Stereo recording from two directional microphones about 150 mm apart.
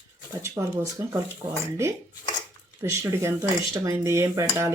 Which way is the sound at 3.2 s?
20° right (ahead or behind).